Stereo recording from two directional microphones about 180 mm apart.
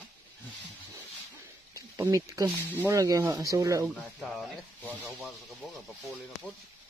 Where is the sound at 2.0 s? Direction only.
20° right (ahead or behind).